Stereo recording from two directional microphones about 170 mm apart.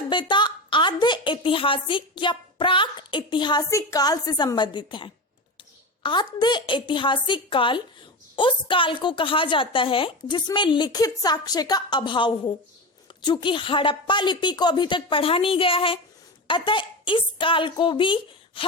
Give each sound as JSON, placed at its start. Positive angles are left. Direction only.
{"t": 0.1, "sound": "a woman's voice", "side_deg": 25}